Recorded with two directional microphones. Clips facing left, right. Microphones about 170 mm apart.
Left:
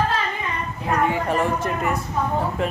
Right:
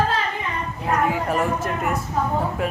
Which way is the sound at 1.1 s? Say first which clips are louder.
Even; centre (ahead or behind).